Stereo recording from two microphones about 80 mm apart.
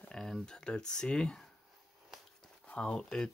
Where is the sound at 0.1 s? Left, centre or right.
Centre.